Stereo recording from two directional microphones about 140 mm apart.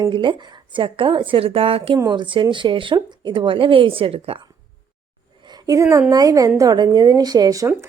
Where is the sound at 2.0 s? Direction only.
30° right (ahead or behind).